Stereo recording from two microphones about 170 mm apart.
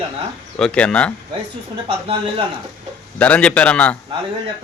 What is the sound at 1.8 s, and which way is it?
Speech, 30° right (ahead or behind).